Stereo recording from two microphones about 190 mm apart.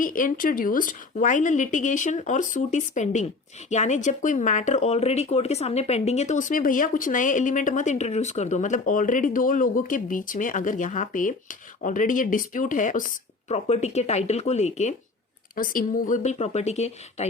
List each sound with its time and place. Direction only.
0.0 s a woman's voice: 45° left (ahead or behind)